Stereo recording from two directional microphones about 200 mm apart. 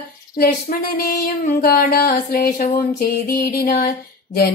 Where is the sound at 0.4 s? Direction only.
50° left (ahead or behind).